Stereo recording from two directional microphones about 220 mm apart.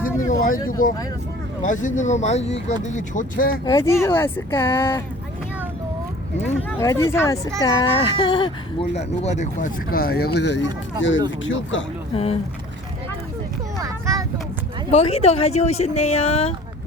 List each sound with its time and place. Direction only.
0.2 s a sound: 35° left (ahead or behind)
0.5 s speech: 15° left (ahead or behind)
1.6 s speech: 35° left (ahead or behind)
3.7 s speech: 15° left (ahead or behind)
6.7 s speech: 15° left (ahead or behind); by 10.6 s 50° left (ahead or behind)
10.6 s speech: 15° right (ahead or behind)
11.4 s speech: 60° left (ahead or behind)
12.1 s speech: 25° left (ahead or behind)
13.7 s vehicle: 15° right (ahead or behind)
14.8 s speech: 30° left (ahead or behind)